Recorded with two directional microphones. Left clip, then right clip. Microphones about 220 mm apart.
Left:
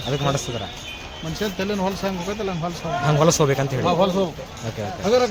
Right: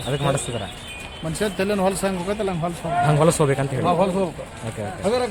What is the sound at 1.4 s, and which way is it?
Speech, 55° right (ahead or behind).